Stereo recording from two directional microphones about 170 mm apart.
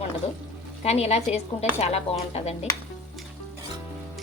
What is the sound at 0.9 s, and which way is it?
A woman's voice, 40° left (ahead or behind).